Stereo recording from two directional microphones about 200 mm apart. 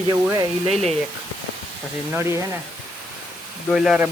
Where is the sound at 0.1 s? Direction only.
15° right (ahead or behind).